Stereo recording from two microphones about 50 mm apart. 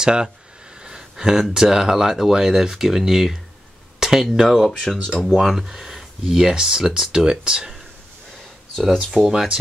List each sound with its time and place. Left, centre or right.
0.0 s speech: centre
4.6 s speech: centre
8.8 s speech: centre